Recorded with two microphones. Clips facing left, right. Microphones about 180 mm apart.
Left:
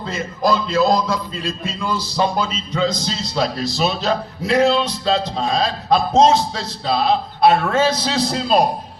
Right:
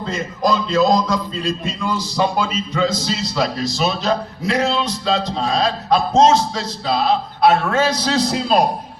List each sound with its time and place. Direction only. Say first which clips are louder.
0.5 s a man's voice: right 1 dB; 10° left (ahead or behind)
1.5 s a man's voice: right 1 dB; 15° right (ahead or behind)
3.4 s a man's voice: even; centre (ahead or behind)